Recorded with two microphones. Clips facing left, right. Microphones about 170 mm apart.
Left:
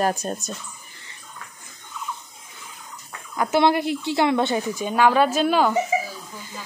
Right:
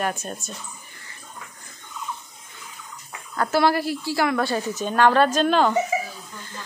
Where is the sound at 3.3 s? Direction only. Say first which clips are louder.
Left 1 dB; 15° left (ahead or behind).